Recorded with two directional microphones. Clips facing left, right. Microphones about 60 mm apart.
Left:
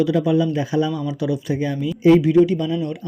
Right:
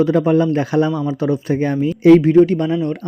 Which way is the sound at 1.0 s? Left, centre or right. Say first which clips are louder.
Right 4 dB; right.